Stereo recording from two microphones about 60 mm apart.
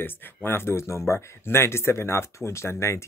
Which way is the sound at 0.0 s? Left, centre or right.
Left.